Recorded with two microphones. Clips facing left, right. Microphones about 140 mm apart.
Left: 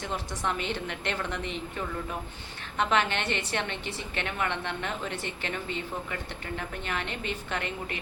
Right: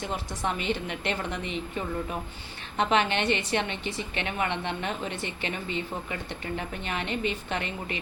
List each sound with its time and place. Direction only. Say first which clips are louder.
0.1 s a woman's voice: left 2 dB; 15° right (ahead or behind)
2.7 s a woman's voice: right 2 dB; 20° right (ahead or behind)